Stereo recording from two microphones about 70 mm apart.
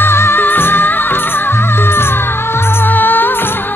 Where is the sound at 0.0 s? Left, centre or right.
Left.